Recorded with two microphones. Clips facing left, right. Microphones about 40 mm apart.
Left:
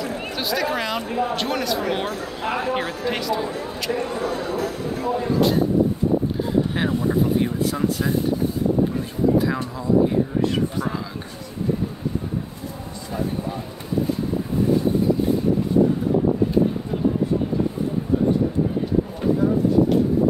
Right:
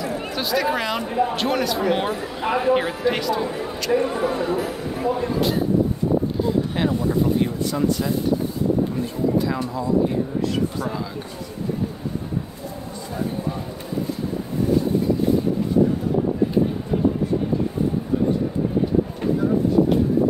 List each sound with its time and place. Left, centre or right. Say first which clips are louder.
0.0 s a sound: right 1 dB; centre
0.7 s speech: right 2 dB; centre
2.0 s speech: right 2 dB; centre
4.1 s speech: right 3 dB; centre
6.4 s speech: even; centre